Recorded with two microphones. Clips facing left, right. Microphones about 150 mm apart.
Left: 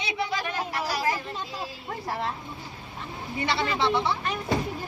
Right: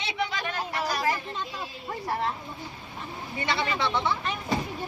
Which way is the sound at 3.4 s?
30° left (ahead or behind).